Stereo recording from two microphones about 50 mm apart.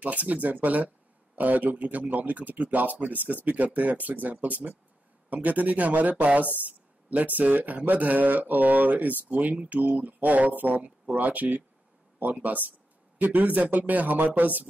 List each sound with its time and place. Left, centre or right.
0.0 s speech: right